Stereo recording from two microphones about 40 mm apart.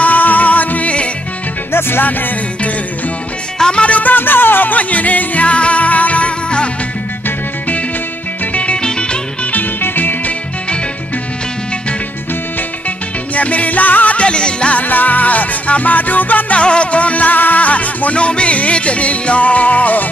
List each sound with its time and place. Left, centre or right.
0.0 s music: left
1.7 s music: left
2.0 s music: left
3.5 s music: centre
3.8 s music: left
4.1 s music: left
4.7 s music: left
7.2 s music: left
8.8 s music: left
9.5 s music: left
13.3 s music: left
14.1 s music: left
14.8 s music: left
16.5 s music: left